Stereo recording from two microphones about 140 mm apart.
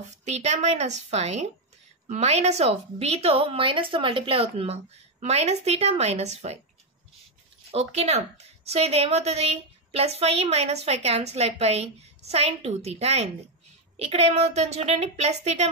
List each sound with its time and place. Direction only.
0.2 s a woman's voice: 50° right (ahead or behind)
7.7 s a woman's voice: 50° right (ahead or behind)